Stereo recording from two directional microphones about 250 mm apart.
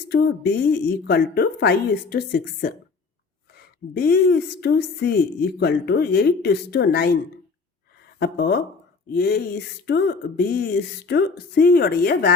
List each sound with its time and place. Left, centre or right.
0.1 s a woman's voice: left
8.2 s a woman's voice: left